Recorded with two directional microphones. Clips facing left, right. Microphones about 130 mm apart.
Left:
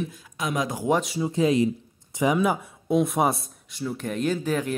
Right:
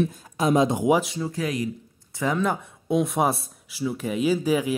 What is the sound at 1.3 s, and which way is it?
Speech, 25° left (ahead or behind).